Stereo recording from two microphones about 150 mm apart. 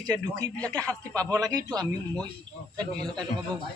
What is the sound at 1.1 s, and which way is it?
Speech, 20° right (ahead or behind).